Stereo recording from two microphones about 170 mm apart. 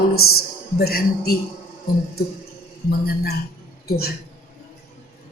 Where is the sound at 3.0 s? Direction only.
65° left (ahead or behind).